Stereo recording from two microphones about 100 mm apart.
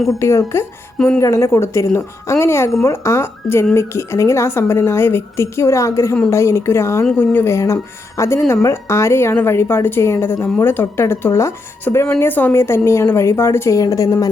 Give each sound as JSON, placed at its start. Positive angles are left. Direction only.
{"t": 0.2, "sound": "a woman's voice", "side_deg": 30}